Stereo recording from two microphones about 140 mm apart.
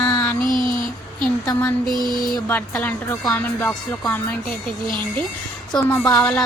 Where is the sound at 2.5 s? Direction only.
10° left (ahead or behind).